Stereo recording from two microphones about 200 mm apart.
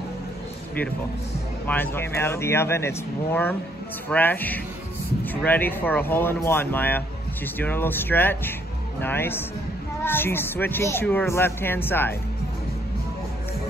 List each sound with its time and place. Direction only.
1.7 s speech: 10° left (ahead or behind)